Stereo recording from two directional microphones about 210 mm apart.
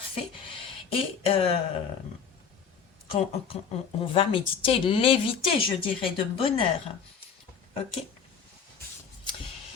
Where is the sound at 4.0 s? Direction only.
25° left (ahead or behind).